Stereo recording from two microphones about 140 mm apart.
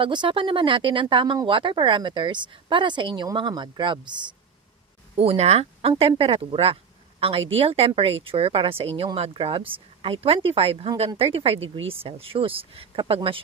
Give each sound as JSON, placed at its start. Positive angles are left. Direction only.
{"t": 0.0, "sound": "speech", "side_deg": -35}
{"t": 5.1, "sound": "speech", "side_deg": -45}